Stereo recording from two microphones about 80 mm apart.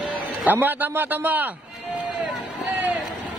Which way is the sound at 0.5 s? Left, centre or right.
Right.